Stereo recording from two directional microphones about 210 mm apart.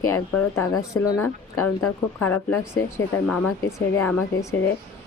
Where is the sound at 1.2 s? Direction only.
90° left.